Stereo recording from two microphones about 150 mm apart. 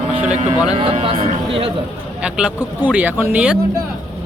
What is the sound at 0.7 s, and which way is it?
Speech, 40° right (ahead or behind).